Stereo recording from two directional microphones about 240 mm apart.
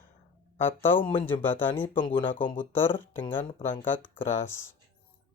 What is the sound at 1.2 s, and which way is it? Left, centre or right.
Speech, centre.